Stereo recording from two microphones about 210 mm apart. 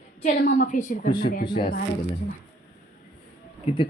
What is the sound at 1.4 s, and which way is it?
Speech, 20° left (ahead or behind).